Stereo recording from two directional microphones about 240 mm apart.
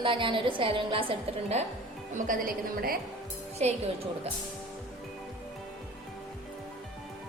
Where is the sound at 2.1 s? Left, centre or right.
Right.